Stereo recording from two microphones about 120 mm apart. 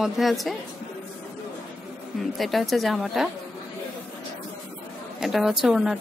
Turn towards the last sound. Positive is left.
turn(degrees=-5)  # may be behind; listen again after turning